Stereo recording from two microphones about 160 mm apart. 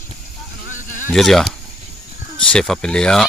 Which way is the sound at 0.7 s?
55° left (ahead or behind).